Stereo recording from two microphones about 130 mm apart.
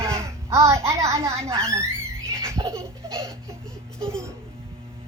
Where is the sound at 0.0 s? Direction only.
20° right (ahead or behind).